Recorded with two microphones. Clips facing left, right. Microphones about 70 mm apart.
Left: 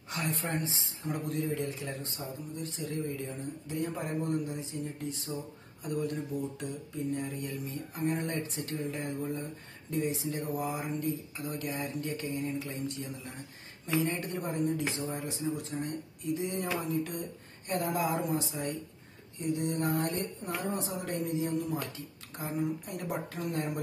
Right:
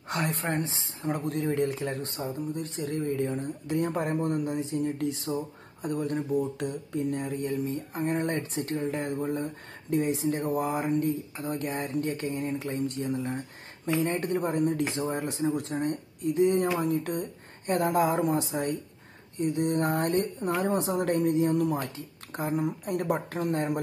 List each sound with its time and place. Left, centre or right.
0.1 s speech: right
5.8 s speech: right
6.6 s speech: right
7.3 s speech: right
8.0 s speech: right
13.8 s speech: right
14.1 s speech: right
20.6 s speech: right